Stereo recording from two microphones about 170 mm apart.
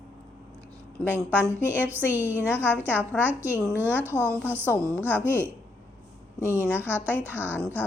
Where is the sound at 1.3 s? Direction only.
10° right (ahead or behind).